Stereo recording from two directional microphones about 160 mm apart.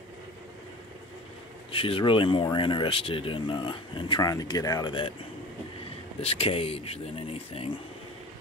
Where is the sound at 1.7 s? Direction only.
35° left (ahead or behind).